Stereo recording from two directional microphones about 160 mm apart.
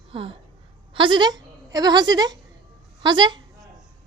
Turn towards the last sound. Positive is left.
turn(degrees=-30)  # may be behind; listen again after turning